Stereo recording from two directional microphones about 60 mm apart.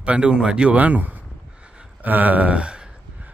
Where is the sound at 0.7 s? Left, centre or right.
Right.